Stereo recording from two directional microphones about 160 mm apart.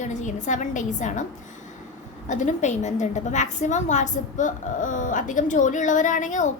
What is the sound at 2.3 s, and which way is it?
A woman's voice, 50° left (ahead or behind).